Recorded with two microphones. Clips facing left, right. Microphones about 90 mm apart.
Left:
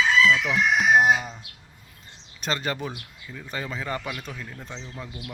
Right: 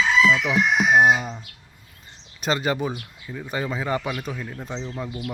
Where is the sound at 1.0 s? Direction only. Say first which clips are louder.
Right 2 dB; 15° right (ahead or behind).